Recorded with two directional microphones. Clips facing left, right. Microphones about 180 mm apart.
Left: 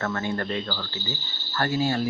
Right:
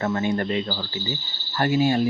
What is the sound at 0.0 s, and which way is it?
Speech, 15° right (ahead or behind).